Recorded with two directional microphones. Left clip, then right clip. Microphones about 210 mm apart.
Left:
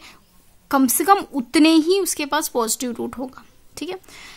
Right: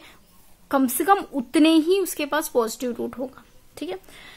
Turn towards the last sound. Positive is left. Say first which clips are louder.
# left 2 dB
turn(degrees=35)  # may be behind; listen again after turning